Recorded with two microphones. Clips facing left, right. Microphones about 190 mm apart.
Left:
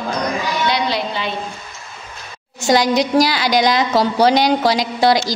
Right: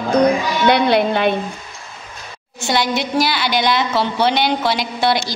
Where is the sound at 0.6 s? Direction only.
55° right (ahead or behind).